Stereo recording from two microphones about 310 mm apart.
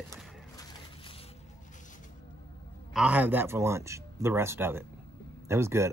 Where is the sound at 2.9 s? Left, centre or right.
Centre.